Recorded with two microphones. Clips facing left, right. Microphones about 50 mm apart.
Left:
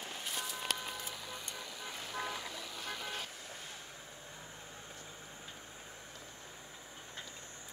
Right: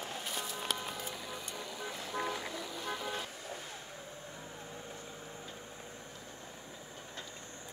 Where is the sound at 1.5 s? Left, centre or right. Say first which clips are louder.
Right 3 dB; centre.